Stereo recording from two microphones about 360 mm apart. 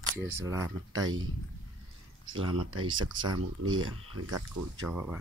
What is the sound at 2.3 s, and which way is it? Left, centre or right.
Speech, right.